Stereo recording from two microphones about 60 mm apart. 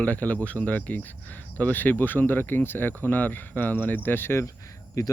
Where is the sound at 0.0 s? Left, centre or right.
Left.